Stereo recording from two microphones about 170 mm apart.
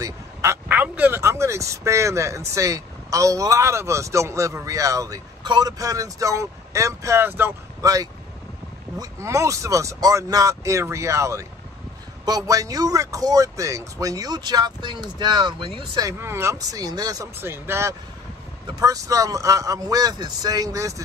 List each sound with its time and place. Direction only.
0.0 s speech: 15° right (ahead or behind)